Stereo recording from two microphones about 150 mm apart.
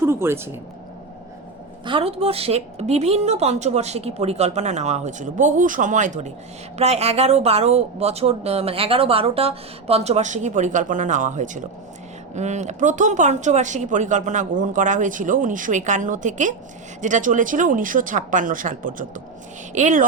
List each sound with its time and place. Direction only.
0.0 s speech: 15° right (ahead or behind)
1.8 s speech: 35° right (ahead or behind); by 20.1 s 55° right (ahead or behind)